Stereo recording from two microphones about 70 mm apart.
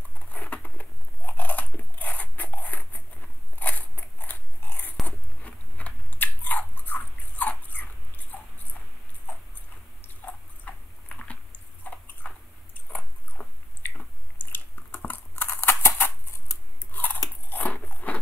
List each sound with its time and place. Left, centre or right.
0.3 s biting: left
10.7 s typing: left
11.9 s a sound: left
12.2 s biting: centre
12.7 s chewing: left
15.0 s a sound: left
16.9 s crunch: left
17.5 s biting: left